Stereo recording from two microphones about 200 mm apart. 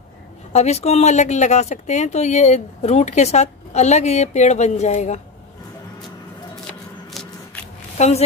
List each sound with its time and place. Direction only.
0.5 s speech: 35° left (ahead or behind)
8.0 s speech: 35° left (ahead or behind)